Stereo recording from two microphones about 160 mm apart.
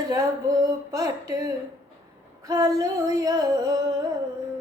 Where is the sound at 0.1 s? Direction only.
20° right (ahead or behind).